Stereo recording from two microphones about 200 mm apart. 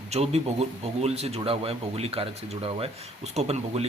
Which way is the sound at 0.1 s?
30° right (ahead or behind).